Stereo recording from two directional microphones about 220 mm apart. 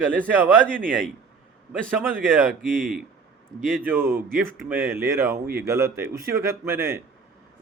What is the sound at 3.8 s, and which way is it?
Speech, 10° right (ahead or behind).